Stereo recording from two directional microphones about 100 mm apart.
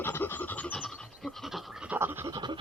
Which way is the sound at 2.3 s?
50° right (ahead or behind).